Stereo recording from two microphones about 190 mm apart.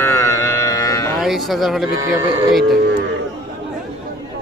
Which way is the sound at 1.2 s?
Centre (ahead or behind).